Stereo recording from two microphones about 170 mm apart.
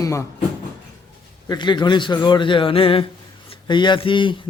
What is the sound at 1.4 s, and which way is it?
A man's voice, 25° left (ahead or behind).